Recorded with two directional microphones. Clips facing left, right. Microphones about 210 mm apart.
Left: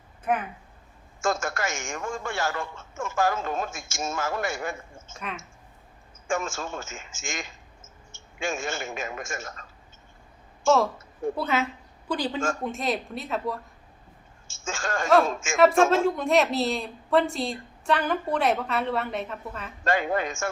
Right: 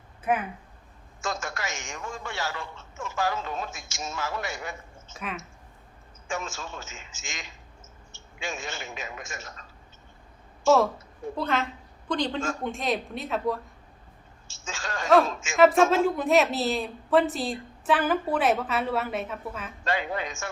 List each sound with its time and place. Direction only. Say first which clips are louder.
0.3 s a woman's voice: even; centre (ahead or behind)
1.2 s a man's voice: left 5 dB; 50° left (ahead or behind)
5.1 s a woman's voice: right 1 dB; centre (ahead or behind)
6.2 s a man's voice: left 5 dB; 50° left (ahead or behind)
11.3 s a woman's voice: right 2 dB; 5° left (ahead or behind)
14.4 s a man's voice: left 5 dB; 50° left (ahead or behind)
15.9 s a woman's voice: even; centre (ahead or behind)
19.8 s a man's voice: left 4 dB; 50° left (ahead or behind)